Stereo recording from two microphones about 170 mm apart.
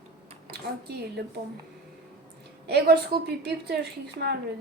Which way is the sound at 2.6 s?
70° right (ahead or behind).